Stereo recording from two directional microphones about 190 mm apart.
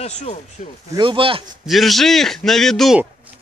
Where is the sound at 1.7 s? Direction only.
Centre (ahead or behind).